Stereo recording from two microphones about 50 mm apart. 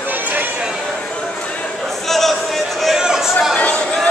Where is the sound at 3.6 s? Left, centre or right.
Left.